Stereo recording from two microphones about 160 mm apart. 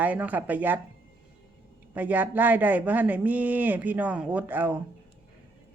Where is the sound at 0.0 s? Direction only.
10° right (ahead or behind).